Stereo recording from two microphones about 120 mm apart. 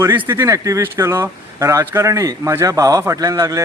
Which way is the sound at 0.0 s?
20° right (ahead or behind).